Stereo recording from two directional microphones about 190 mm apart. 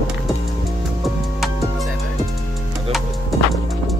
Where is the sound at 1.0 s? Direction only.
Centre (ahead or behind).